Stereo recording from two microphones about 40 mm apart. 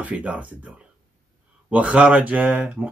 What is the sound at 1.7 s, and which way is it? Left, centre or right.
Speech, right.